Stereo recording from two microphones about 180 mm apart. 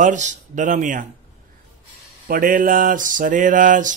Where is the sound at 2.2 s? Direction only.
50° right (ahead or behind).